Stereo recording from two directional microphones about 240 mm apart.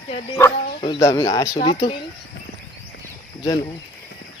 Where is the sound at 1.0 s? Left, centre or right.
Centre.